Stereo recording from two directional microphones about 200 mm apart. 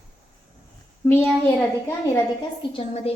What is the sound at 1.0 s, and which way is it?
Speech, 15° left (ahead or behind).